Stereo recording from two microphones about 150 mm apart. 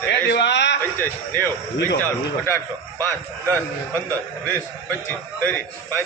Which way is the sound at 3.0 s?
15° left (ahead or behind).